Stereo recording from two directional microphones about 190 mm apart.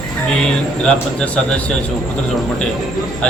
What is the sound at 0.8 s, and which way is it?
Speech, 5° left (ahead or behind).